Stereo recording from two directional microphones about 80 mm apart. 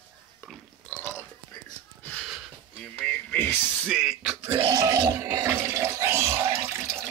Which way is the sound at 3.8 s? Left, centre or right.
Centre.